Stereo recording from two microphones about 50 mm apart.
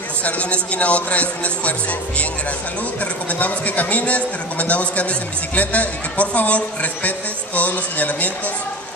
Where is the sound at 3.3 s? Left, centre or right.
Left.